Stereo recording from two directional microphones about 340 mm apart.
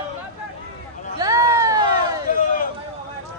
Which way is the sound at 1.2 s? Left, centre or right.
Centre.